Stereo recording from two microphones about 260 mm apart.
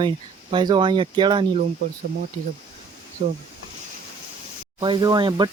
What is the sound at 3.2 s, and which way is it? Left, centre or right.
Speech, right.